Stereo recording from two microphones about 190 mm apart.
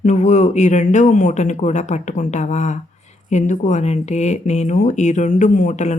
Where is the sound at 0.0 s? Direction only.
40° left (ahead or behind).